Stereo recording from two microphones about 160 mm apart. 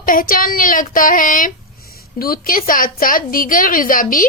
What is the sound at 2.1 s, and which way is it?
A woman's voice, 70° left (ahead or behind).